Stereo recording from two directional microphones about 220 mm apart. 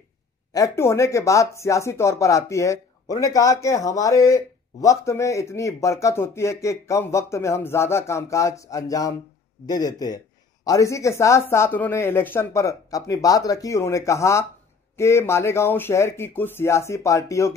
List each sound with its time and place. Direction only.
0.5 s a man's voice: 15° left (ahead or behind)